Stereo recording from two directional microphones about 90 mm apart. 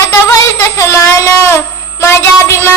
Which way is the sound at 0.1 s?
35° left (ahead or behind).